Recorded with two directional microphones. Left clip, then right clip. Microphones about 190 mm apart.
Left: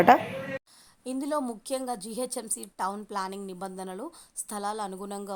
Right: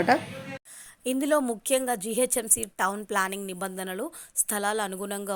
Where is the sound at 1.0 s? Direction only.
20° right (ahead or behind).